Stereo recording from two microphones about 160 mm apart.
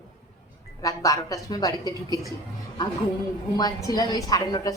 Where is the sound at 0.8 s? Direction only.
20° left (ahead or behind).